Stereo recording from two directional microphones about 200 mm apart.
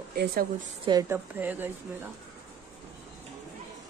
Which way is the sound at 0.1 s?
50° right (ahead or behind).